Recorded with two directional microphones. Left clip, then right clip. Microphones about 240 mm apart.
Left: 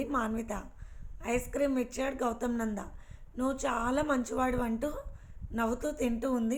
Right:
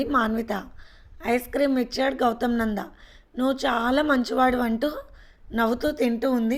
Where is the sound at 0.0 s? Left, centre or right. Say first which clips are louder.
Right 9 dB; right.